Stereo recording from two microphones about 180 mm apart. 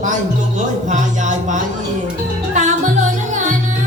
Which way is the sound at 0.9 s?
45° right (ahead or behind).